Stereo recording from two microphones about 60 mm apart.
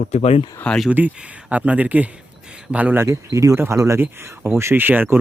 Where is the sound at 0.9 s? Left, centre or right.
Right.